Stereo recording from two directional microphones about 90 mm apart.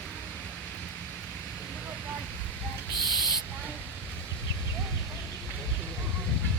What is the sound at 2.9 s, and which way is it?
Owl, 50° left (ahead or behind).